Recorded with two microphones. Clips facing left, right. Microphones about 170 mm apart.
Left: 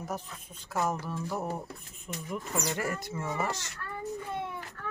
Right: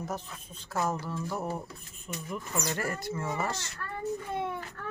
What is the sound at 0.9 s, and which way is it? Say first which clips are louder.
Speech: even; 15° left (ahead or behind).